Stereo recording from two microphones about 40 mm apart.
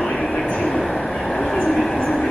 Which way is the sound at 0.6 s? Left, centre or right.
Centre.